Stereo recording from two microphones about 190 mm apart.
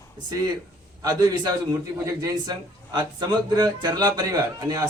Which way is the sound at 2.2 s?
20° right (ahead or behind).